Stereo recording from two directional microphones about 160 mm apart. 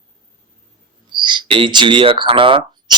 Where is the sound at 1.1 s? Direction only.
30° right (ahead or behind).